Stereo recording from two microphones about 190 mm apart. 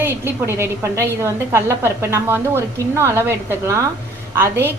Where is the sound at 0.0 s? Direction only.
15° right (ahead or behind).